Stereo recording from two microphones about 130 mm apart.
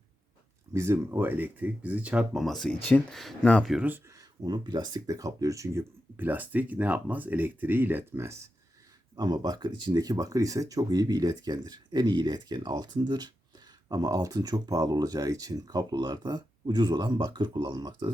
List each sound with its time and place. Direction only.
0.7 s speech: 20° right (ahead or behind); by 3.7 s 5° left (ahead or behind)
3.7 s speech: 10° right (ahead or behind)
4.2 s speech: 30° right (ahead or behind)
9.1 s speech: 30° right (ahead or behind)